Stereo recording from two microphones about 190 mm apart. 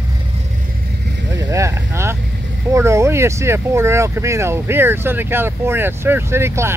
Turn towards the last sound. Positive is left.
turn(degrees=-15)  # may be behind; listen again after turning